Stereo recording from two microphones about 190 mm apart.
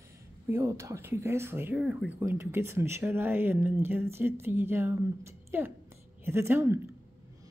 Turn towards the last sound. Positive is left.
turn(degrees=-15)  # may be behind; listen again after turning